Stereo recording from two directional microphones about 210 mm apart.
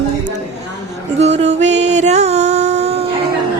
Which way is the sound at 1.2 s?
30° right (ahead or behind).